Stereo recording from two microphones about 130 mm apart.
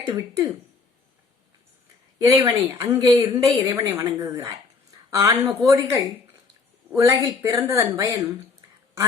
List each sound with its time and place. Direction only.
0.0 s speech: 30° right (ahead or behind)
2.1 s speech: 30° right (ahead or behind)